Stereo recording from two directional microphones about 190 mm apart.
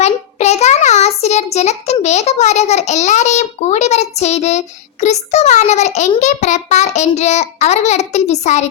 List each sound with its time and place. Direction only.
0.0 s child singing: 35° left (ahead or behind)